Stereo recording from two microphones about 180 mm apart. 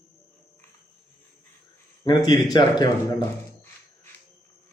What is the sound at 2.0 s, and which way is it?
Speech, 20° left (ahead or behind).